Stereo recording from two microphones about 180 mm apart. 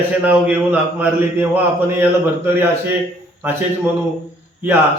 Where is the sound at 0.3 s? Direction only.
10° right (ahead or behind).